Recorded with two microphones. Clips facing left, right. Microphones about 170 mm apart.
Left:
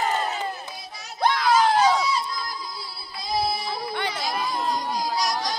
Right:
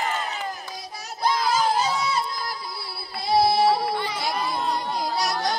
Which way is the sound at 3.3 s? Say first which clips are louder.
Right 7 dB; 70° right (ahead or behind).